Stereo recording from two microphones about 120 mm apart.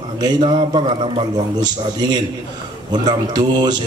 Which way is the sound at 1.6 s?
35° right (ahead or behind).